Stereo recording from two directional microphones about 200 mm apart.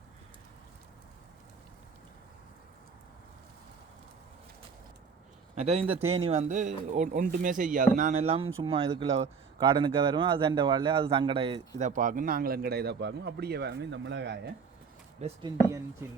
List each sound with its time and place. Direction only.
5.5 s a man's voice: 30° right (ahead or behind)
11.8 s a man's voice: 40° right (ahead or behind); by 14.3 s 60° right (ahead or behind)
15.2 s speech: 25° right (ahead or behind)